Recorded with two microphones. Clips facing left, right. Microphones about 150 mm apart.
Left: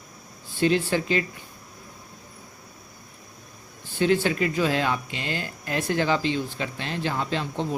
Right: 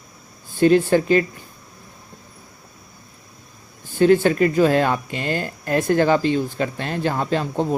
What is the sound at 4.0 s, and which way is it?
Speech, 50° right (ahead or behind).